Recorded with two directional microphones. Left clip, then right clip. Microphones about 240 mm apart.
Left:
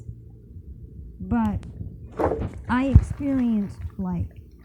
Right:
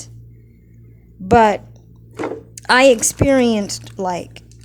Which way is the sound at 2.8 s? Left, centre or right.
Centre.